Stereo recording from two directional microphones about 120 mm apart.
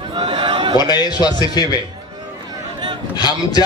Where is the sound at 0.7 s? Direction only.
35° left (ahead or behind).